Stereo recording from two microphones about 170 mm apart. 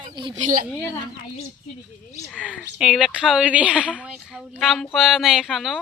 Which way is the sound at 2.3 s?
5° left (ahead or behind).